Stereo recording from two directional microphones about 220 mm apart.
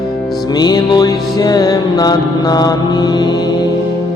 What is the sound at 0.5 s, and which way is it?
Music, 20° left (ahead or behind).